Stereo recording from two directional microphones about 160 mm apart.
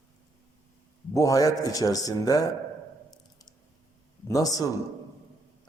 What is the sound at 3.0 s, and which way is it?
Drip, 25° left (ahead or behind).